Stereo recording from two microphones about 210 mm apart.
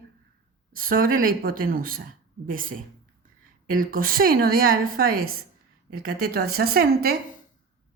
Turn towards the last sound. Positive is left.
turn(degrees=-45)  # may be behind; listen again after turning